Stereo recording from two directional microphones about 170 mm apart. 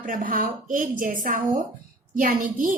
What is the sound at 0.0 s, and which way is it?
A woman's voice, 55° right (ahead or behind).